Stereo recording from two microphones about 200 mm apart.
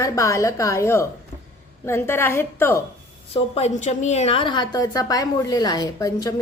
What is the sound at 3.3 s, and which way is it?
A woman's voice, 30° left (ahead or behind).